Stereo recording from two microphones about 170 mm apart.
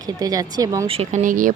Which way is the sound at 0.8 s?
35° right (ahead or behind).